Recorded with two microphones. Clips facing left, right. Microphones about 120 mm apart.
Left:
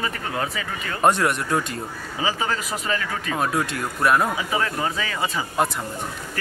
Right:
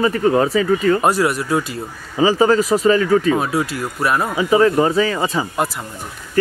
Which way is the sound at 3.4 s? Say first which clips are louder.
Right 3 dB; 5° right (ahead or behind).